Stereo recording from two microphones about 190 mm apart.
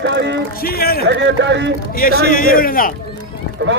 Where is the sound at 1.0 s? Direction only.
70° right (ahead or behind).